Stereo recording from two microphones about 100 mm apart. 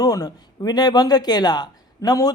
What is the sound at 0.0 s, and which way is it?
Speech, 40° left (ahead or behind).